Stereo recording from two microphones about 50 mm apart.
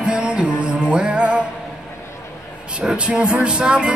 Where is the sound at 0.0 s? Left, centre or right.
Centre.